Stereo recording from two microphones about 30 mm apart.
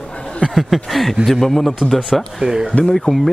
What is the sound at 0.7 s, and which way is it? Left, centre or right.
Speech, centre.